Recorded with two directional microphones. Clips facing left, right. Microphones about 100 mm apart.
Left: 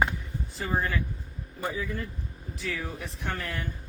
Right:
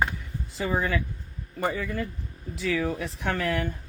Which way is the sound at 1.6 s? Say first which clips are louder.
Right 4 dB; 70° right (ahead or behind).